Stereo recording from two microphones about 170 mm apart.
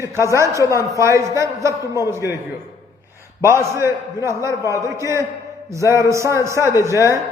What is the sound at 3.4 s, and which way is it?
A man's voice, 15° right (ahead or behind).